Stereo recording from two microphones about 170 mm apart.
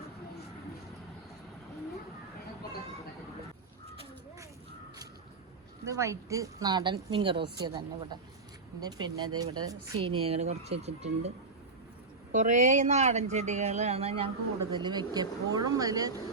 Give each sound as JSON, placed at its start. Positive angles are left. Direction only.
{"t": 5.8, "sound": "a woman's voice", "side_deg": -15}
{"t": 12.3, "sound": "speech", "side_deg": -45}
{"t": 14.7, "sound": "a woman's voice", "side_deg": -25}